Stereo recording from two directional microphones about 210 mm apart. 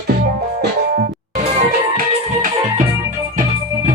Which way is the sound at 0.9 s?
40° right (ahead or behind).